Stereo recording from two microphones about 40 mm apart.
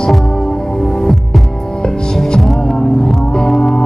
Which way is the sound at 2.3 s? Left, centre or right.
Centre.